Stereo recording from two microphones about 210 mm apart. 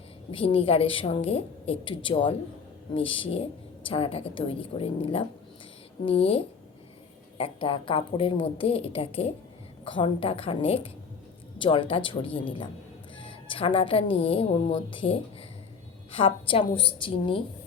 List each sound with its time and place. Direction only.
0.3 s a woman's voice: 25° left (ahead or behind)